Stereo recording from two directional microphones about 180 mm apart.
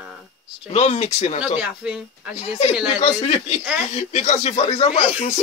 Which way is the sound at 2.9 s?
35° left (ahead or behind).